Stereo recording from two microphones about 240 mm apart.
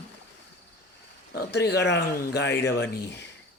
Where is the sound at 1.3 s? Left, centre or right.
Left.